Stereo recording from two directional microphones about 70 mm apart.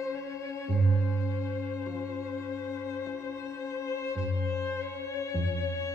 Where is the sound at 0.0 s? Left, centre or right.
Left.